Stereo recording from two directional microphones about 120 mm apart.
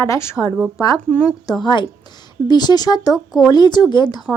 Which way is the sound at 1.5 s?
40° left (ahead or behind).